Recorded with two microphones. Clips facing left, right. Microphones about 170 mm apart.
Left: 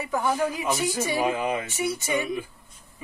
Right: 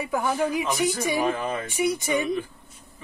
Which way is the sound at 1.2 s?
15° left (ahead or behind).